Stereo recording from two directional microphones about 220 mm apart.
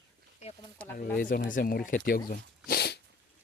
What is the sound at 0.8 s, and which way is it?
Speech, 5° left (ahead or behind).